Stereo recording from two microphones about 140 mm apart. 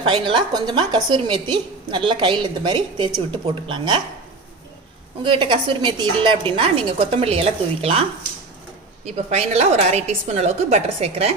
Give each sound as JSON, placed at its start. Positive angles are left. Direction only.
{"t": 0.0, "sound": "a woman's voice", "side_deg": -35}
{"t": 5.2, "sound": "a woman's voice", "side_deg": -35}
{"t": 9.0, "sound": "a woman's voice", "side_deg": -50}